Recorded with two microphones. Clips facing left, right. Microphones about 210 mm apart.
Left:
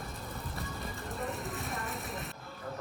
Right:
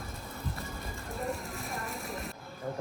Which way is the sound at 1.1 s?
Centre (ahead or behind).